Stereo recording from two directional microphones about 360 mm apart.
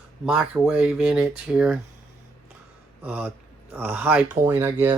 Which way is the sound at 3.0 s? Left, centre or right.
Centre.